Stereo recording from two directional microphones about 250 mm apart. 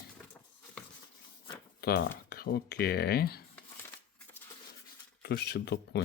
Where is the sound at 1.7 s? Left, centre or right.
Left.